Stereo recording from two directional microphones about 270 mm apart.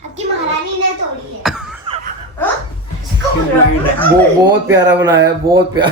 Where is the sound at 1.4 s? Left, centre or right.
Centre.